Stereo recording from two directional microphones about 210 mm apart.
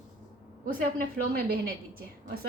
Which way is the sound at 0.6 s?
40° right (ahead or behind).